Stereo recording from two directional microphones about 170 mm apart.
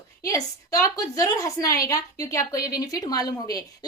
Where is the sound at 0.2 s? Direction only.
20° left (ahead or behind).